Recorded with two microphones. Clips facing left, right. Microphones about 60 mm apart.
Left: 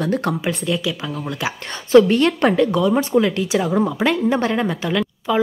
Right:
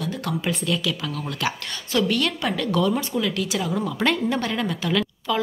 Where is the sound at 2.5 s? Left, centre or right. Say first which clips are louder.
Left 6 dB; left.